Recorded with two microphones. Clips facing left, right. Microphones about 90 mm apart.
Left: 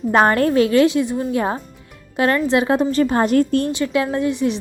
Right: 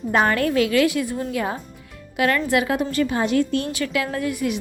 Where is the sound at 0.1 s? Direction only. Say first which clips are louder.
Left 4 dB; 35° left (ahead or behind); by 1.4 s 20° left (ahead or behind).